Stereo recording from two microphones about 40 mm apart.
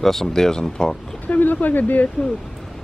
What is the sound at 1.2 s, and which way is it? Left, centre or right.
Speech, left.